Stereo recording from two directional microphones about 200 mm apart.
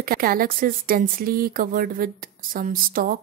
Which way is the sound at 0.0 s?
45° right (ahead or behind).